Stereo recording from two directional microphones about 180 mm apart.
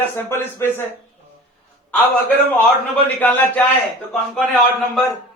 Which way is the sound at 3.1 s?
10° left (ahead or behind).